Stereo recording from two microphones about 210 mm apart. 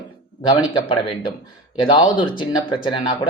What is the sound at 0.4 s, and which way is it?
Speech, 25° left (ahead or behind).